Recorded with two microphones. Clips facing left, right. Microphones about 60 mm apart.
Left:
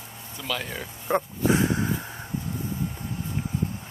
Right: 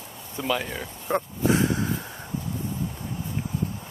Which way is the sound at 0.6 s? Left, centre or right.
Centre.